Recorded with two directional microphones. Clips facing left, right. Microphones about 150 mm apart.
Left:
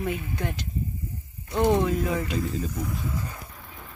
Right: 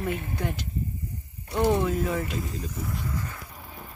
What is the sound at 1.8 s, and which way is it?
Speech, 5° right (ahead or behind).